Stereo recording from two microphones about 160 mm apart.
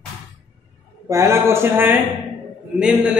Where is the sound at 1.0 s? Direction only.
20° right (ahead or behind).